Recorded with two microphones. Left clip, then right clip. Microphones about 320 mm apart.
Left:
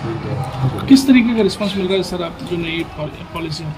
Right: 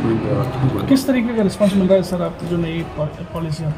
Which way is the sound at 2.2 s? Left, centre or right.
Centre.